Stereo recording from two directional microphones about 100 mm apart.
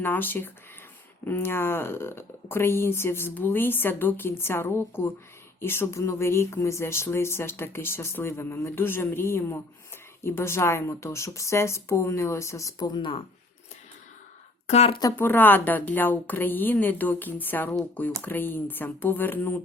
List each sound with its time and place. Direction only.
0.0 s speech: 20° left (ahead or behind)
12.9 s speech: 55° left (ahead or behind)
14.7 s speech: 90° left
15.1 s speech: 20° left (ahead or behind)